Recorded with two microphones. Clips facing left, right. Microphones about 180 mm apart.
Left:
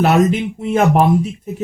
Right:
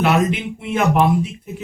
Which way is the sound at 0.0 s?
40° left (ahead or behind).